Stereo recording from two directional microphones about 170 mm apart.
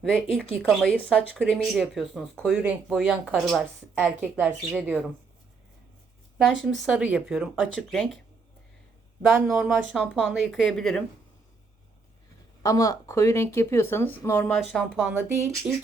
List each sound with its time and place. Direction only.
0.0 s speech: 5° left (ahead or behind)
2.5 s a woman's voice: 5° right (ahead or behind)
6.4 s speech: centre (ahead or behind)
9.3 s speech: 5° right (ahead or behind)
12.6 s speech: 20° left (ahead or behind); by 14.8 s 5° left (ahead or behind)
14.9 s a woman's voice: 10° right (ahead or behind)